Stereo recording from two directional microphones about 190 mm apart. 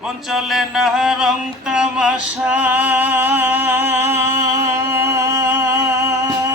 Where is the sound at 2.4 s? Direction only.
10° right (ahead or behind).